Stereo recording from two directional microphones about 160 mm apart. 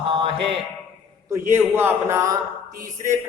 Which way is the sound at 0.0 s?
30° right (ahead or behind).